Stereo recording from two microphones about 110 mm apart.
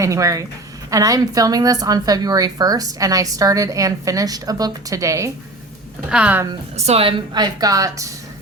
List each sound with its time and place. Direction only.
0.0 s a woman's voice: 30° right (ahead or behind)
6.1 s a woman's voice: 10° right (ahead or behind)
6.7 s a woman's voice: 75° right (ahead or behind)
7.3 s a woman's voice: 35° right (ahead or behind)